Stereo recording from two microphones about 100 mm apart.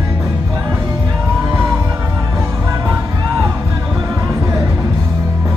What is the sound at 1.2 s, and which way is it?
Music, 20° right (ahead or behind).